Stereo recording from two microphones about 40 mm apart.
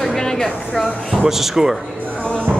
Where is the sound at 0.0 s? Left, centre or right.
Centre.